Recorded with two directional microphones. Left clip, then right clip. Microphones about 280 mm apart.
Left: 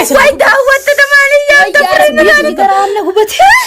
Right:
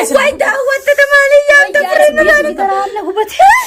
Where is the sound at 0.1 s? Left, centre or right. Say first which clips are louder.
Left 7 dB; centre.